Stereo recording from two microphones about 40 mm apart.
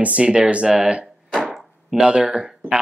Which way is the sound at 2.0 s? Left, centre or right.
Right.